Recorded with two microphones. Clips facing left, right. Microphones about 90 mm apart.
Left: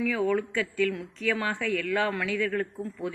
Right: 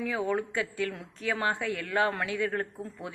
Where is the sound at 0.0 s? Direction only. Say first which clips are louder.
Left 3 dB; 20° right (ahead or behind).